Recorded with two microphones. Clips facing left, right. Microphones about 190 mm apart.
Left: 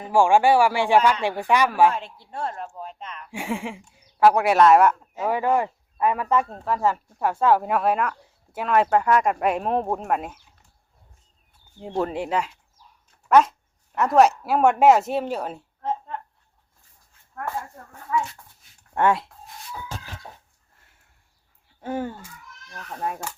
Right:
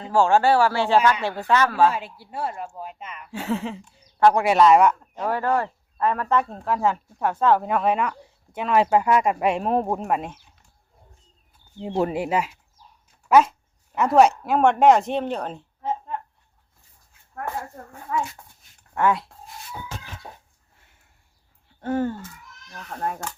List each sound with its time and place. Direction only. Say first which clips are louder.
0.0 s speech: left 1 dB; 15° left (ahead or behind)
1.9 s speech: even; 5° right (ahead or behind)
3.3 s speech: right 2 dB; 10° left (ahead or behind)
11.9 s speech: right 2 dB; 10° right (ahead or behind); by 15.6 s 5° left (ahead or behind)
15.8 s a sound: even; 5° right (ahead or behind)
18.9 s speech: left 1 dB; 25° left (ahead or behind)
20.7 s sniff: right 1 dB; centre (ahead or behind)
21.8 s speech: right 4 dB; 10° left (ahead or behind)